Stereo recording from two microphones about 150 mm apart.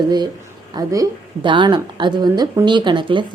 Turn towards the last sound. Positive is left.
turn(degrees=-30)  # may be behind; listen again after turning